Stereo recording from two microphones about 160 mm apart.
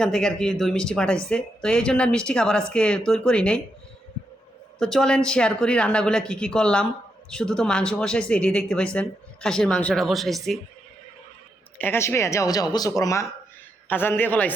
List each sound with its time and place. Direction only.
0.0 s speech: 5° left (ahead or behind)
4.8 s speech: 5° left (ahead or behind)
11.8 s speech: 15° left (ahead or behind)